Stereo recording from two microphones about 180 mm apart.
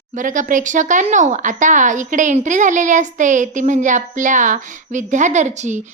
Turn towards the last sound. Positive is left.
turn(degrees=-40)  # may be behind; listen again after turning